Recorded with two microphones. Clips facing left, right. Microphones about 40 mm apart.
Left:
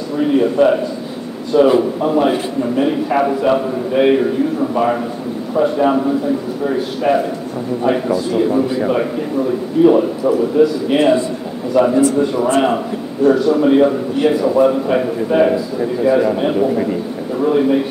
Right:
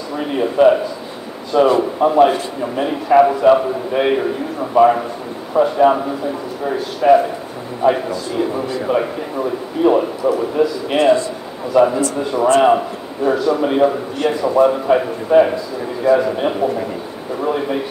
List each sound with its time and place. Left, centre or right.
0.1 s a man's voice: centre
8.6 s a man's voice: centre
9.4 s a man's voice: centre